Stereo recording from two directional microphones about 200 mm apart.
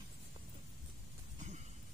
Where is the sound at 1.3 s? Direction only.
35° right (ahead or behind).